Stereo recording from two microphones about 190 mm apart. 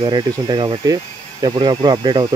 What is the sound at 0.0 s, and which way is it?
Speech, 25° right (ahead or behind).